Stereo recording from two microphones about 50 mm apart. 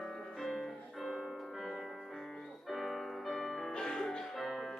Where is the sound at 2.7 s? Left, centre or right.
Centre.